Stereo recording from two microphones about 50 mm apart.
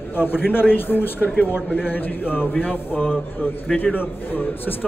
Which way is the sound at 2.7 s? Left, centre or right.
Left.